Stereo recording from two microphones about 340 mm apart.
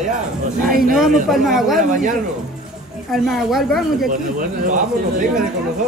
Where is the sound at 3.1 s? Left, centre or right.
Centre.